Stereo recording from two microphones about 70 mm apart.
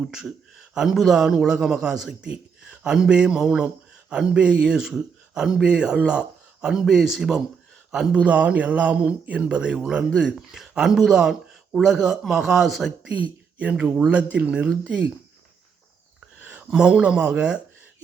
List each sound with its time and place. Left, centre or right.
0.1 s a man's voice: centre
8.2 s speech: centre
13.1 s a man's voice: centre
16.4 s a sound: right
16.6 s a man's voice: centre